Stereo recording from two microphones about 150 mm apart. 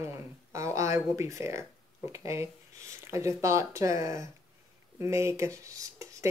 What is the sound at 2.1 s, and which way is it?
Speech, 20° right (ahead or behind).